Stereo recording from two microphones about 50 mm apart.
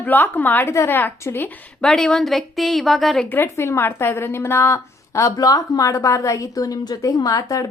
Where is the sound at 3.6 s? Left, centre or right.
Left.